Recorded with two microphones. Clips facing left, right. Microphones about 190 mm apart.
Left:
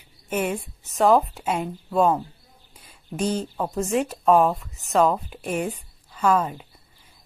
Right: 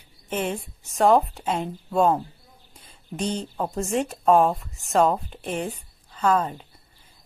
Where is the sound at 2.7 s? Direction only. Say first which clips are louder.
Left 2 dB; 5° left (ahead or behind).